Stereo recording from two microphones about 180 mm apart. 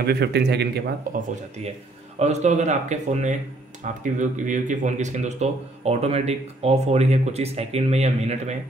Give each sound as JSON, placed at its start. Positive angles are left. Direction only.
{"t": 0.0, "sound": "speech", "side_deg": -65}
{"t": 1.1, "sound": "speech", "side_deg": -55}
{"t": 2.1, "sound": "speech", "side_deg": -40}